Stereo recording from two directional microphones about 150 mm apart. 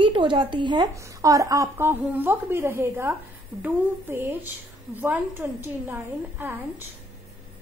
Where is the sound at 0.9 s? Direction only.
20° right (ahead or behind).